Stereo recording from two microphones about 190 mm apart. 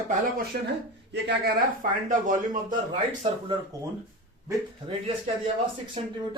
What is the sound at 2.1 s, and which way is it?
Speech, 45° right (ahead or behind).